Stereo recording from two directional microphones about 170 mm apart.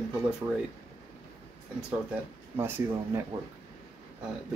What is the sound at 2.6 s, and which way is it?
Speech, 15° right (ahead or behind).